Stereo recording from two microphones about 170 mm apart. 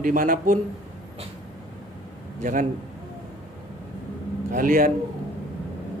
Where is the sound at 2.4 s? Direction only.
50° right (ahead or behind).